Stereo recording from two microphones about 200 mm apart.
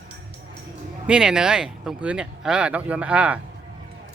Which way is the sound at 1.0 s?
5° right (ahead or behind).